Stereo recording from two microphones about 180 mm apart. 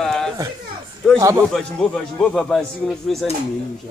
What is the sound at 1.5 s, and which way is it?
Speech, 5° left (ahead or behind).